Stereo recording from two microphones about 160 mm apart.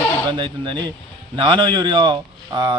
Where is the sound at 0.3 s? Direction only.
30° right (ahead or behind).